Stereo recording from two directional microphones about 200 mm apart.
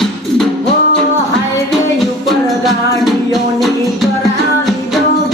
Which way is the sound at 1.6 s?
Centre (ahead or behind).